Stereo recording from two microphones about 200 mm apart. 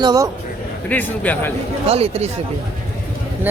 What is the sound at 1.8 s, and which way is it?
Speech, 30° right (ahead or behind).